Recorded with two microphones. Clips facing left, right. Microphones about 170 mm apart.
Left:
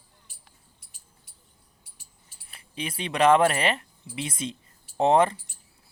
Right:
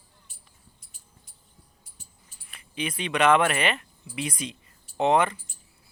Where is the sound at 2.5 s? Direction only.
30° left (ahead or behind).